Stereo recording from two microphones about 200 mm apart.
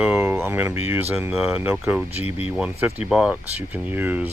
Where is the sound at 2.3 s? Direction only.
30° left (ahead or behind).